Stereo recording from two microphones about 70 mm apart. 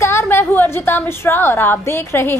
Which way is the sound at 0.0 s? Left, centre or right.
Left.